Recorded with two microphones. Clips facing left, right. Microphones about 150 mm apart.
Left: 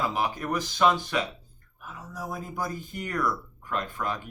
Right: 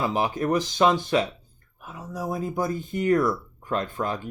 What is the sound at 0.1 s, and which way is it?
Speech, 25° right (ahead or behind).